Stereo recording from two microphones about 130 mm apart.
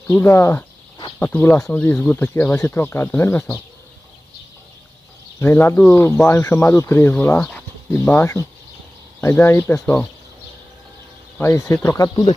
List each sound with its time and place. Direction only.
0.1 s speech: 20° left (ahead or behind)
5.4 s speech: 15° left (ahead or behind)
7.4 s bird: 10° left (ahead or behind)
8.1 s speech: 20° left (ahead or behind)
11.3 s speech: 20° left (ahead or behind)